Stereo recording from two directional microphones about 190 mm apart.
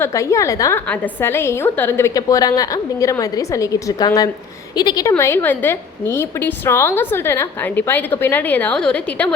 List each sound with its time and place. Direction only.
0.0 s a woman's voice: 15° left (ahead or behind)